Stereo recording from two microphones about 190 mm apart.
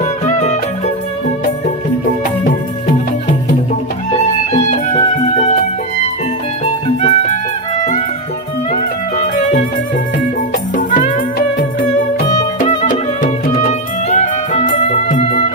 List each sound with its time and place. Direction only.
0.0 s music: 40° left (ahead or behind)
4.1 s music: 40° left (ahead or behind)
7.0 s music: 40° left (ahead or behind)
10.8 s music: 40° left (ahead or behind)